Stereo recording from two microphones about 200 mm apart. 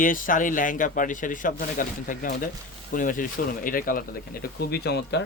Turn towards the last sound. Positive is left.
turn(degrees=55)  # may be behind; listen again after turning